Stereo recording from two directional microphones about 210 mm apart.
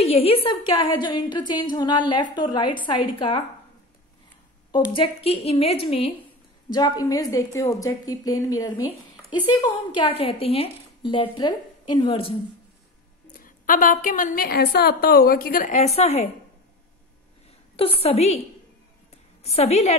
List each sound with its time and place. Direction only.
0.0 s a woman's voice: 30° left (ahead or behind)
4.7 s a woman's voice: 25° left (ahead or behind)
9.9 s a woman's voice: 25° left (ahead or behind)
13.4 s a woman's voice: 40° left (ahead or behind)
17.7 s a woman's voice: 25° left (ahead or behind)
19.4 s a woman's voice: 30° left (ahead or behind)